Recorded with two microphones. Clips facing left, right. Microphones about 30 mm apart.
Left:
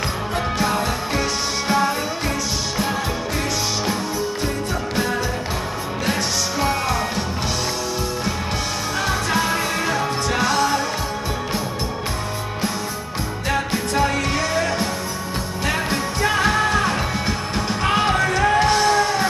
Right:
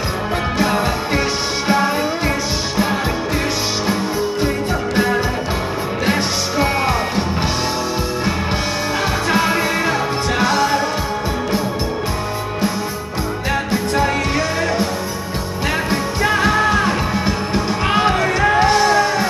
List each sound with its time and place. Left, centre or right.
0.6 s music: right
6.0 s music: right
9.0 s music: right
13.5 s music: centre